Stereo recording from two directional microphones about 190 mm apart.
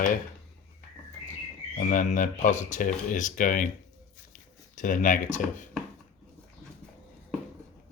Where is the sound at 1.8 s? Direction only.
45° left (ahead or behind).